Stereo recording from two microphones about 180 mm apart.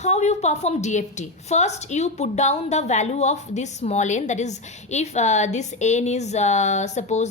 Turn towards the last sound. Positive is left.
turn(degrees=40)  # may be behind; listen again after turning